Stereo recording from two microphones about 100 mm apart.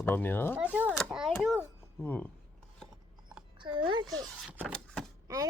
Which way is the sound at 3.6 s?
55° right (ahead or behind).